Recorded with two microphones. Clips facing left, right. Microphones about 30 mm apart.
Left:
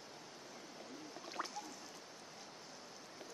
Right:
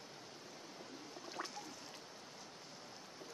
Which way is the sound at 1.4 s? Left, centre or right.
Centre.